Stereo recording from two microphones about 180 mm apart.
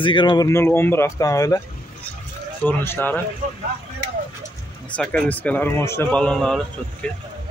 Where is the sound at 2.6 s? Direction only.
10° left (ahead or behind).